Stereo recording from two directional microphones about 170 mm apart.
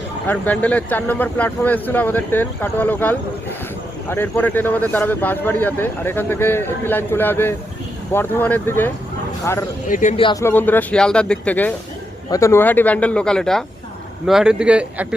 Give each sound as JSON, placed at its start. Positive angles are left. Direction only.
{"t": 0.3, "sound": "a man's voice", "side_deg": 10}
{"t": 9.8, "sound": "speech", "side_deg": 45}
{"t": 10.4, "sound": "a man's voice", "side_deg": 10}